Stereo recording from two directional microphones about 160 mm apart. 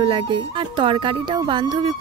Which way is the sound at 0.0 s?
30° right (ahead or behind).